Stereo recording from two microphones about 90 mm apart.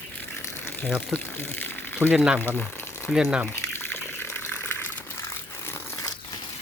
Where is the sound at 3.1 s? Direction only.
5° left (ahead or behind).